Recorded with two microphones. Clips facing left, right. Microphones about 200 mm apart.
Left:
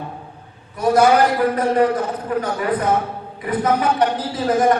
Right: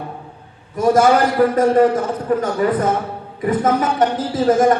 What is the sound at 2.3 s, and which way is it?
A man's voice, 40° right (ahead or behind).